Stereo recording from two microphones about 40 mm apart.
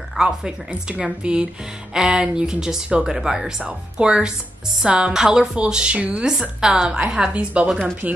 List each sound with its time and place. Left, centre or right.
0.2 s a woman's voice: right
6.6 s a woman's voice: centre